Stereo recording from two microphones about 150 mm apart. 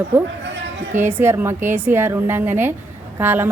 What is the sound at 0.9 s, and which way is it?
A woman's voice, 15° right (ahead or behind).